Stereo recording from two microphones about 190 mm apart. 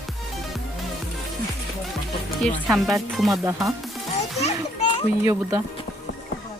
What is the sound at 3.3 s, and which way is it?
Music, 15° right (ahead or behind).